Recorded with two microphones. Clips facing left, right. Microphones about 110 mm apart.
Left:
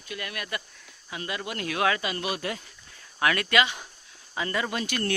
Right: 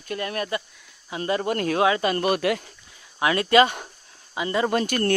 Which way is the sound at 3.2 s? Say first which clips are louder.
Right 6 dB; 25° right (ahead or behind).